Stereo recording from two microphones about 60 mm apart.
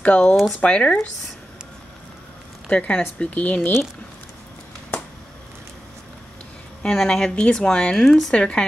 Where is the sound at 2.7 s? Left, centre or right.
Centre.